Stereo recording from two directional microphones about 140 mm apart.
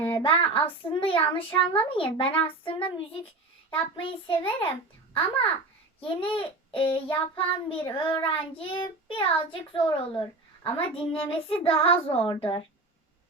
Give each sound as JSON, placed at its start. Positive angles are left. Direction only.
{"t": 0.0, "sound": "child singing", "side_deg": 35}
{"t": 0.9, "sound": "a child's voice", "side_deg": 40}